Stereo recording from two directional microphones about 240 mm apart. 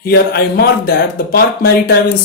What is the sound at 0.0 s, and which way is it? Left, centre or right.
Speech, left.